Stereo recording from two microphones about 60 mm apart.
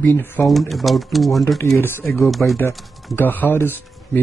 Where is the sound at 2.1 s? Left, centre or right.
Centre.